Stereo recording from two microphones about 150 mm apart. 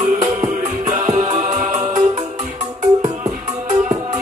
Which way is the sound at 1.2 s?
45° right (ahead or behind).